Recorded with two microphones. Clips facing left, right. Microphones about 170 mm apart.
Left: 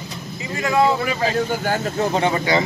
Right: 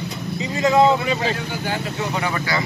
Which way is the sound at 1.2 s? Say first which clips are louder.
Left 4 dB; 45° left (ahead or behind).